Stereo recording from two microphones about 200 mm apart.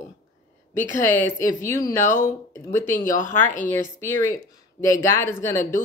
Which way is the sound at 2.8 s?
40° left (ahead or behind).